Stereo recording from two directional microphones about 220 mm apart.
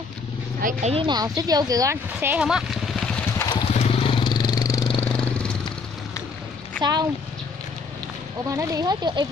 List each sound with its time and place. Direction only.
0.6 s speech: 40° right (ahead or behind)
0.9 s speech: 20° right (ahead or behind); by 3.4 s 5° left (ahead or behind)
3.4 s vehicle: 30° left (ahead or behind)
5.1 s vehicle: 5° left (ahead or behind)
6.8 s speech: 20° right (ahead or behind)
8.5 s speech: 15° right (ahead or behind)